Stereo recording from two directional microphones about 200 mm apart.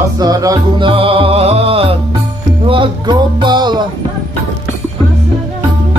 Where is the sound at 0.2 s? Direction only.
20° right (ahead or behind).